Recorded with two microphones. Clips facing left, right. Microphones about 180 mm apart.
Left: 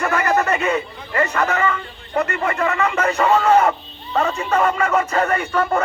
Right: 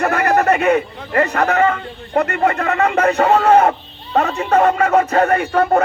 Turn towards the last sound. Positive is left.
turn(degrees=-50)  # may be behind; listen again after turning